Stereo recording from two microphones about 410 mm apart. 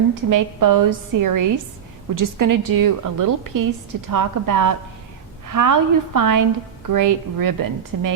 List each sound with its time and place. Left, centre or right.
0.1 s a woman's voice: right